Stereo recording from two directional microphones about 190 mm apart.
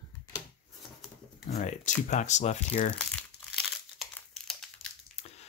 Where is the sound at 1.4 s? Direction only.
40° left (ahead or behind).